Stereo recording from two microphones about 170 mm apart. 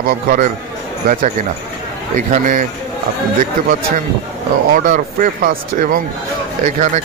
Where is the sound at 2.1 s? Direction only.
45° right (ahead or behind).